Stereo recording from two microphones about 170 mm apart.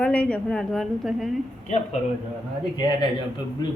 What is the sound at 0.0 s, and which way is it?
A woman's voice, 5° left (ahead or behind).